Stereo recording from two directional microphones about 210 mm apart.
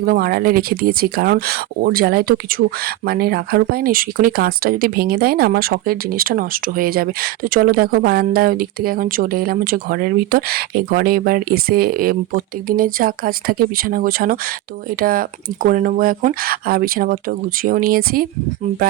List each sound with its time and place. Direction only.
0.0 s speech: 45° right (ahead or behind)